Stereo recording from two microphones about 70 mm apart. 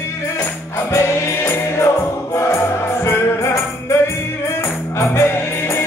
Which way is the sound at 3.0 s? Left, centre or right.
Left.